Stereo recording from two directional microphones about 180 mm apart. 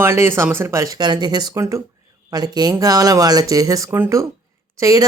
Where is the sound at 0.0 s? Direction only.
15° right (ahead or behind).